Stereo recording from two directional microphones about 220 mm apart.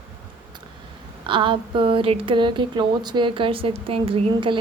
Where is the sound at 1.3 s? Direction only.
20° right (ahead or behind).